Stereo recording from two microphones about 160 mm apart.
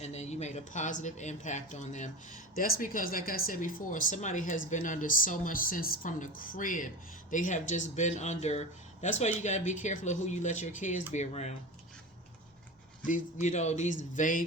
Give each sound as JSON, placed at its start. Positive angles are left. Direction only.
{"t": 0.0, "sound": "speech", "side_deg": 45}
{"t": 2.6, "sound": "speech", "side_deg": 65}
{"t": 13.1, "sound": "speech", "side_deg": 50}